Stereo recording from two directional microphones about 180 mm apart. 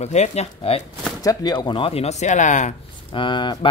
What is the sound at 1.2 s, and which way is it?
Speech, 20° left (ahead or behind).